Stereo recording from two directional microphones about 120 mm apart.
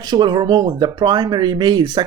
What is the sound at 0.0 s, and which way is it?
Speech, 35° right (ahead or behind).